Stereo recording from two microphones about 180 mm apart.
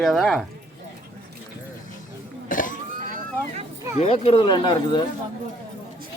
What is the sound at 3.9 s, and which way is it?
Speech, 35° left (ahead or behind).